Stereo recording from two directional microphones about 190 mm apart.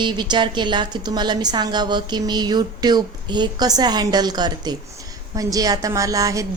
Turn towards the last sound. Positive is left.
turn(degrees=-15)  # may be behind; listen again after turning